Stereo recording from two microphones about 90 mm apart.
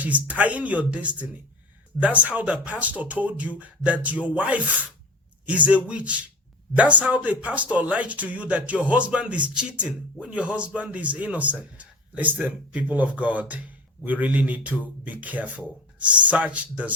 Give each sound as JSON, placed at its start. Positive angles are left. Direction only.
{"t": 0.0, "sound": "speech", "side_deg": -15}